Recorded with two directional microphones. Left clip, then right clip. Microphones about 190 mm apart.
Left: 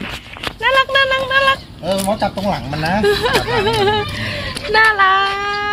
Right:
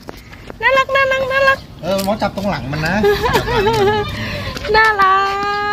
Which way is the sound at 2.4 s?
40° left (ahead or behind).